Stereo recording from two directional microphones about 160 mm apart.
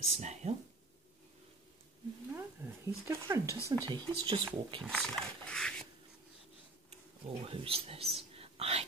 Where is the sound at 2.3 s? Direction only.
15° right (ahead or behind).